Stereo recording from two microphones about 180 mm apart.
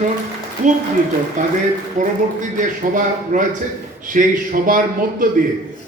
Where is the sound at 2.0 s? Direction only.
45° right (ahead or behind).